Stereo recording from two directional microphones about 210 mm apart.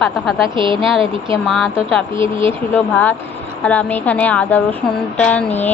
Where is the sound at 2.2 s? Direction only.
25° right (ahead or behind).